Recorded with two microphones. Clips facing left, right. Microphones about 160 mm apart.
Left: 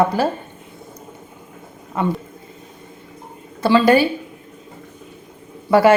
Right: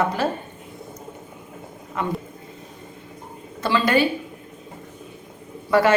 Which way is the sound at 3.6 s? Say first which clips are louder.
Left 6 dB; 35° left (ahead or behind).